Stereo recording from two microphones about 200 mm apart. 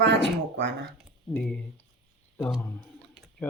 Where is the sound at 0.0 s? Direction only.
60° right (ahead or behind).